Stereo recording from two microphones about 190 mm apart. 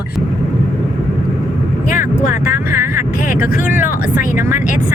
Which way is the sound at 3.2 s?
45° left (ahead or behind).